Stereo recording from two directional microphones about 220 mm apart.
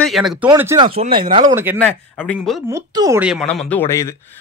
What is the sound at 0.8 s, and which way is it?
Speech, 25° right (ahead or behind).